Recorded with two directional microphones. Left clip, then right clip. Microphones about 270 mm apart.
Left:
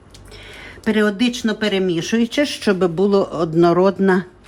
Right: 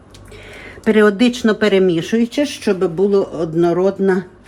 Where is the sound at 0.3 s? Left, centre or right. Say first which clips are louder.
Right 2 dB; centre.